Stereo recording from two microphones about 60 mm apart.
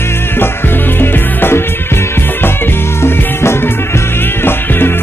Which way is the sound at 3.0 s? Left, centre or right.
Left.